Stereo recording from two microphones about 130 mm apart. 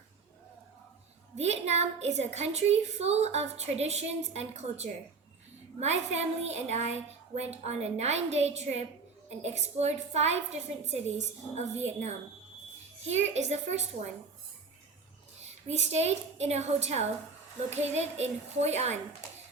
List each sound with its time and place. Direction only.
1.4 s a woman's voice: 60° right (ahead or behind)
15.6 s a woman's voice: 55° right (ahead or behind)